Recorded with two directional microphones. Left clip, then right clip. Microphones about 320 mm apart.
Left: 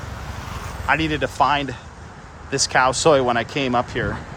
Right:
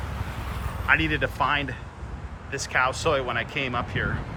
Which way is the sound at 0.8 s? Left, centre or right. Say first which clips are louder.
Left 2 dB; centre.